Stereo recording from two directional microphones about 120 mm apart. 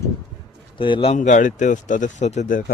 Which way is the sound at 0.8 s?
45° left (ahead or behind).